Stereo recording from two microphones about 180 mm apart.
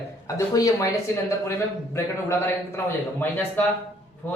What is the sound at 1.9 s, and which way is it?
Speech, 15° left (ahead or behind).